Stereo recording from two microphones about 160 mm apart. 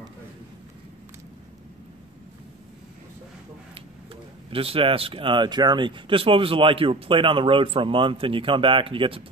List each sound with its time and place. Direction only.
4.5 s speech: 35° right (ahead or behind)